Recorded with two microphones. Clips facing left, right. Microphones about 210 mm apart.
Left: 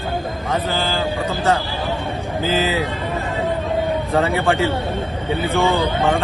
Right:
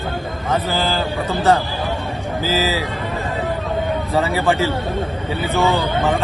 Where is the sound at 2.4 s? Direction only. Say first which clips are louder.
Even; 30° left (ahead or behind).